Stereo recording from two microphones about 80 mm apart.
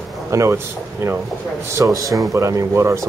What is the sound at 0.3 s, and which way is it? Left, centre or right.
A man's voice, right.